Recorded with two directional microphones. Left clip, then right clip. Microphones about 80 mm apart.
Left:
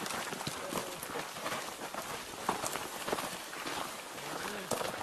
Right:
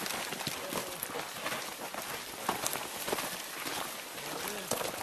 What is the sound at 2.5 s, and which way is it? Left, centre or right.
Run, centre.